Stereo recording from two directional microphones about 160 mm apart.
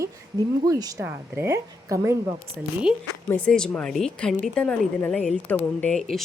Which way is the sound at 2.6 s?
Centre (ahead or behind).